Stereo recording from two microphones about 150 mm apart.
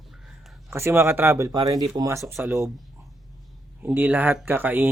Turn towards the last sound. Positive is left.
turn(degrees=-15)  # may be behind; listen again after turning